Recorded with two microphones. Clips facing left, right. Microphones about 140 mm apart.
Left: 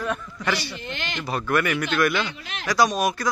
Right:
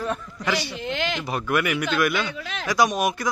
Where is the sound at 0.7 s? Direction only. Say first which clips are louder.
Right 6 dB; 90° right.